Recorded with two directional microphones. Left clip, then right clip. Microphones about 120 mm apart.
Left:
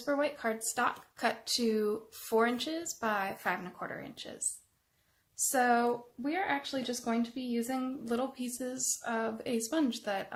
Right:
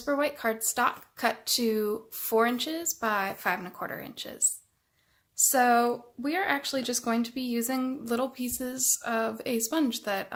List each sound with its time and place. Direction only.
0.0 s speech: 30° right (ahead or behind)
5.5 s speech: 30° right (ahead or behind)